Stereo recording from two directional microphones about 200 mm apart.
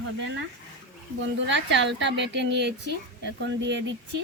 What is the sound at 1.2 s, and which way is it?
Speech, 65° right (ahead or behind).